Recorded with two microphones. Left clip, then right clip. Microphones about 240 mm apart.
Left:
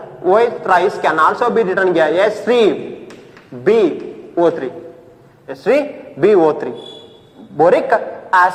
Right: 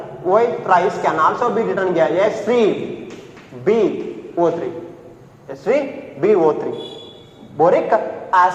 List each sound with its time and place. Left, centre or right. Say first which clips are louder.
0.3 s a man's voice: left 2 dB; left